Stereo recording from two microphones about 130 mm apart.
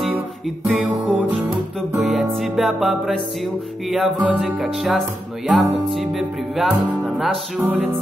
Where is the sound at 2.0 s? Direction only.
Centre (ahead or behind).